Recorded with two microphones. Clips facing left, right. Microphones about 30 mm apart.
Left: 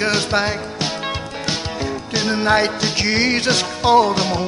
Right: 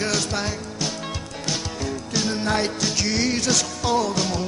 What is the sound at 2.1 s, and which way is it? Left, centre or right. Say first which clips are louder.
Music: left 7 dB; left.